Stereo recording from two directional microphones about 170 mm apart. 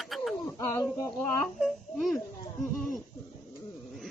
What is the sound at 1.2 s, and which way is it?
A child's voice, centre (ahead or behind).